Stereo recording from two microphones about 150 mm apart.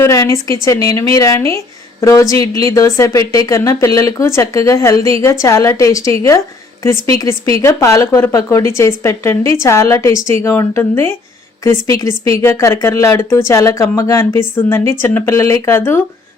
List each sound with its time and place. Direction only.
0.0 s speech: 20° left (ahead or behind)